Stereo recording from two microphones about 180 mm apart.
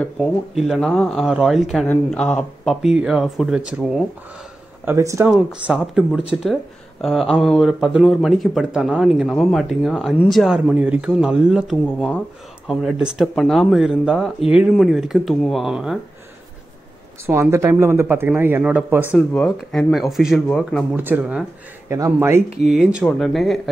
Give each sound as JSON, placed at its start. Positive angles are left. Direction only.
{"t": 0.0, "sound": "speech", "side_deg": 0}
{"t": 4.8, "sound": "speech", "side_deg": -15}
{"t": 5.3, "sound": "speech", "side_deg": 0}
{"t": 17.3, "sound": "speech", "side_deg": -15}
{"t": 19.1, "sound": "speech", "side_deg": 0}
{"t": 22.6, "sound": "speech", "side_deg": 0}